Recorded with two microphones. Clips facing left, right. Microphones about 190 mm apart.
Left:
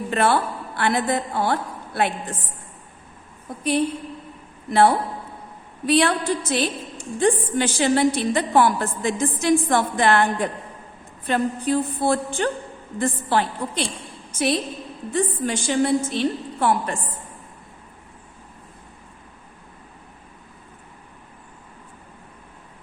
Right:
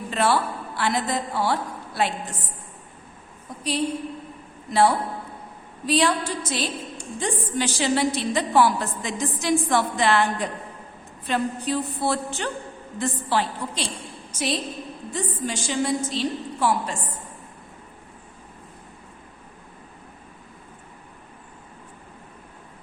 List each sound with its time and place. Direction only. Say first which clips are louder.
0.1 s a woman's voice: left 2 dB; 55° left (ahead or behind)
3.6 s a woman's voice: left 3 dB; 55° left (ahead or behind)
11.3 s a sound: left 3 dB; 50° left (ahead or behind)
13.0 s a woman's voice: left 3 dB; 55° left (ahead or behind)